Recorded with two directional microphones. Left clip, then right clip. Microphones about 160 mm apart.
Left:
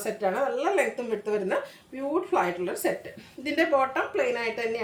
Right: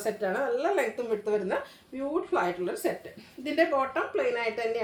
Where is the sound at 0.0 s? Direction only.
20° left (ahead or behind).